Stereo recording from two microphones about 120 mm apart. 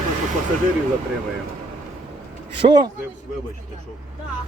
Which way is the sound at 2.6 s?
40° right (ahead or behind).